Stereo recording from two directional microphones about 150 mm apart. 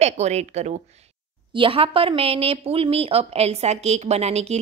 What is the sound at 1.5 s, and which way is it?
A woman's voice, 35° right (ahead or behind).